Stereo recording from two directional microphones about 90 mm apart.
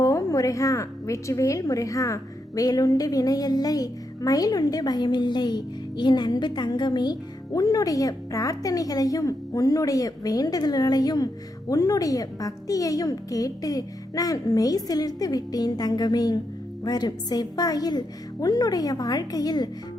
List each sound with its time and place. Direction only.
0.0 s a woman's voice: 40° left (ahead or behind)